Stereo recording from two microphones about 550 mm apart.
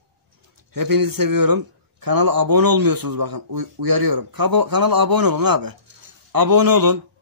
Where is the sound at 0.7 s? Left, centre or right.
Right.